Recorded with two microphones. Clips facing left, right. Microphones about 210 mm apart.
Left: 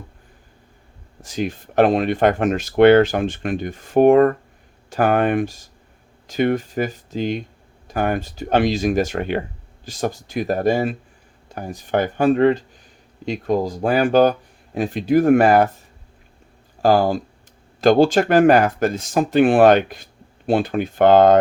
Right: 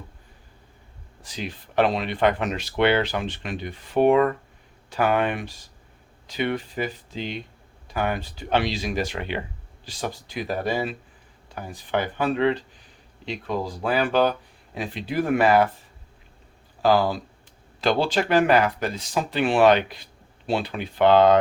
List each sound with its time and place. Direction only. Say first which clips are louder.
1.2 s speech: left 9 dB; 45° left (ahead or behind)
16.8 s speech: left 4 dB; 45° left (ahead or behind)